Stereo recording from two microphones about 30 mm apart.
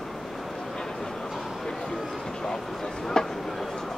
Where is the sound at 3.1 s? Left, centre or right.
Left.